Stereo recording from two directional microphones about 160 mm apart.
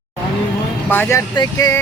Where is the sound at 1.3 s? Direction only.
25° left (ahead or behind).